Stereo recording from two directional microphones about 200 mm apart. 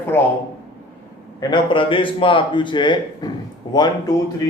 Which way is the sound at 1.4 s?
20° left (ahead or behind).